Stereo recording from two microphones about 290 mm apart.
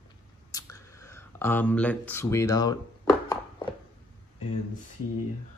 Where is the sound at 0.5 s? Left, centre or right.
Centre.